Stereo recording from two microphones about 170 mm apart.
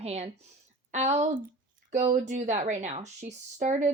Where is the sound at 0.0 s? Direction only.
40° right (ahead or behind).